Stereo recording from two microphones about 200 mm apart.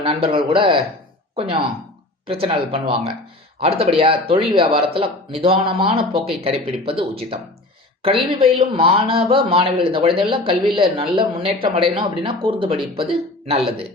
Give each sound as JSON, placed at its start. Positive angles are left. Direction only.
{"t": 0.0, "sound": "speech", "side_deg": -25}